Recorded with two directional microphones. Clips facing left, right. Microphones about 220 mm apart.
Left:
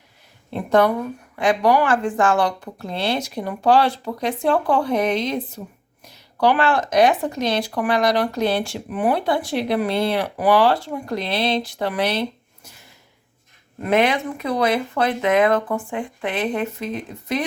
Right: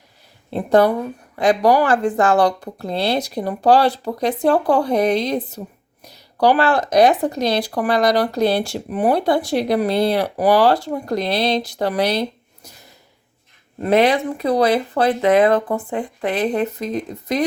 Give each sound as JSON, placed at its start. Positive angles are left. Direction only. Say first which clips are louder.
{"t": 0.5, "sound": "speech", "louder": "right 3 dB", "side_deg": -35}
{"t": 13.8, "sound": "speech", "louder": "right 3 dB", "side_deg": -35}